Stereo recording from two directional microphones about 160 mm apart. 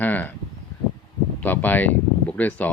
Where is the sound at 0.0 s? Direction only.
10° left (ahead or behind).